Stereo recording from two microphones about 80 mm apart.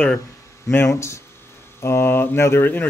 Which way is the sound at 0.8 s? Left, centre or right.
Left.